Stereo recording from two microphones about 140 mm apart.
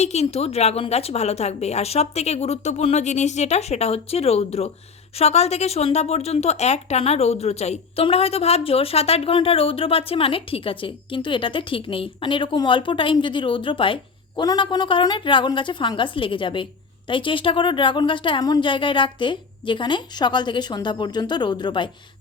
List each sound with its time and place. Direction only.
0.0 s a woman's voice: 50° left (ahead or behind); by 21.8 s 35° left (ahead or behind)